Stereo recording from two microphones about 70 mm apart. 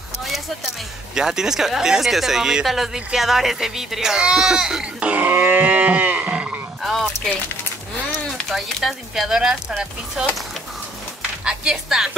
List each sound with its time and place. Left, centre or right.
1.1 s speech: centre
5.1 s livestock: right
6.8 s a sound: centre
8.5 s speech: centre
11.4 s speech: centre